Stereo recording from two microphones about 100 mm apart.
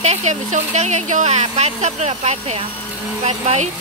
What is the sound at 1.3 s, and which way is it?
Speech, 90° right.